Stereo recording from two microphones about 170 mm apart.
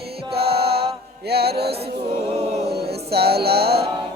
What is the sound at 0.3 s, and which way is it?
Music, 70° right (ahead or behind).